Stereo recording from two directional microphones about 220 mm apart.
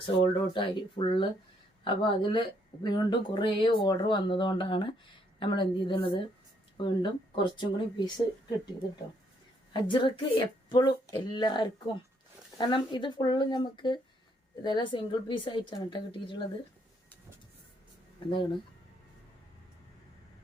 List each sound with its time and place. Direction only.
0.0 s speech: 20° left (ahead or behind)
9.8 s speech: 20° left (ahead or behind)